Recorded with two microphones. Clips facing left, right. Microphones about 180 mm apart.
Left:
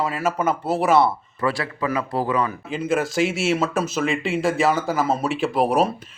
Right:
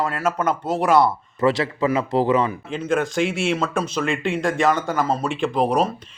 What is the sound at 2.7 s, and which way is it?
A man's voice, 5° left (ahead or behind).